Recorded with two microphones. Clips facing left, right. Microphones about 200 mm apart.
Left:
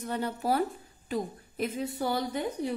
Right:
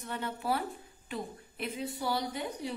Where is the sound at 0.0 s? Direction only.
40° left (ahead or behind).